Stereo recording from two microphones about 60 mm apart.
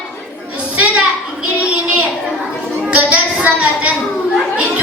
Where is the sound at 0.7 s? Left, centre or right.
Right.